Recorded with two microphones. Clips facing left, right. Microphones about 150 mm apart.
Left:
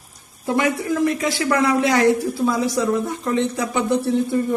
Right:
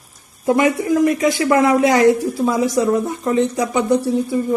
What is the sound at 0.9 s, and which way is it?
Speech, 15° right (ahead or behind).